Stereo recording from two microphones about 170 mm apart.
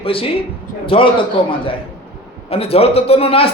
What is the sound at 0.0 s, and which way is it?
A man's voice, 35° left (ahead or behind).